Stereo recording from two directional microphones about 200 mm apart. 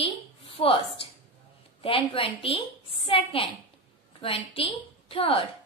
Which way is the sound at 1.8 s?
25° left (ahead or behind).